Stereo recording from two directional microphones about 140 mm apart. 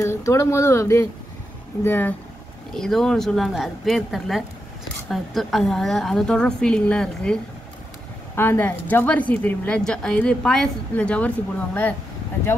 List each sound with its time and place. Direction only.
0.0 s a woman's voice: 20° left (ahead or behind)
2.7 s a woman's voice: 5° left (ahead or behind)
8.4 s a woman's voice: 15° left (ahead or behind)